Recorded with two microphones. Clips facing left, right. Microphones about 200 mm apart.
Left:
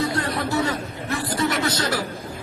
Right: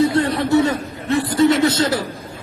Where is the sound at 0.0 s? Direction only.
30° right (ahead or behind).